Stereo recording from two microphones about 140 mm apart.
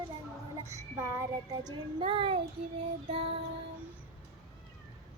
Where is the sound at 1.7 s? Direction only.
35° right (ahead or behind).